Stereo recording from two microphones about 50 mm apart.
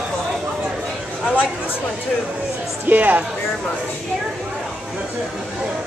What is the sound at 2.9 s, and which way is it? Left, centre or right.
Speech, right.